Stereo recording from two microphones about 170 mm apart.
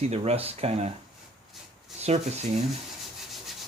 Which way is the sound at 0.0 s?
40° right (ahead or behind).